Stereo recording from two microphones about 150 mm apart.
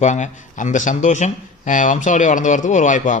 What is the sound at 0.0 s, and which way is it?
Speech, 50° left (ahead or behind).